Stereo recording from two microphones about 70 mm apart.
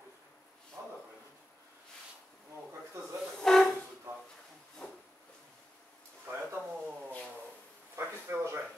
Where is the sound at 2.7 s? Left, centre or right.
Right.